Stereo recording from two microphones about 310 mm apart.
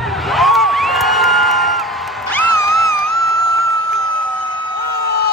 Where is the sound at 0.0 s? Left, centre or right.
Centre.